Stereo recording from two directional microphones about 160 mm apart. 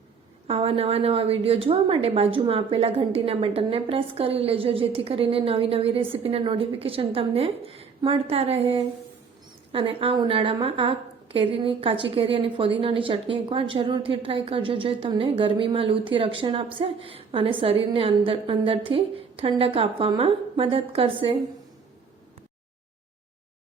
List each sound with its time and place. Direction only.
0.4 s a woman's voice: 40° right (ahead or behind)
9.7 s a woman's voice: 35° right (ahead or behind)